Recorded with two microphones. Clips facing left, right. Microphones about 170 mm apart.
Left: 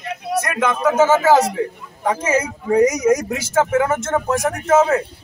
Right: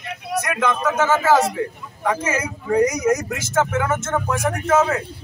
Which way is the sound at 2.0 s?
30° left (ahead or behind).